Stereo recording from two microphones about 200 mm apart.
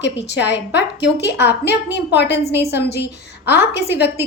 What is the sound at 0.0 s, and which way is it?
A woman's voice, 60° left (ahead or behind).